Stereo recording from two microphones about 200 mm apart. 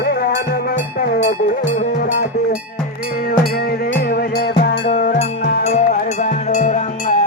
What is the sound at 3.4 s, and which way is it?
Music, 50° left (ahead or behind).